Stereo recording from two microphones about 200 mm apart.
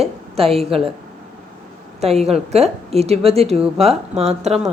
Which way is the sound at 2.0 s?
30° right (ahead or behind).